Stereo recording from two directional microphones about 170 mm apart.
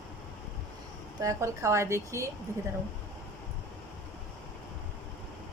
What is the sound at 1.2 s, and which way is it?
A woman's voice, 15° right (ahead or behind).